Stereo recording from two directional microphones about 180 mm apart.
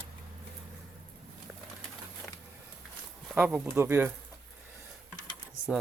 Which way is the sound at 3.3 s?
10° right (ahead or behind).